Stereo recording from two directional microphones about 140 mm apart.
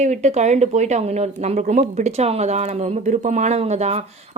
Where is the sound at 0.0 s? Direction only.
55° right (ahead or behind).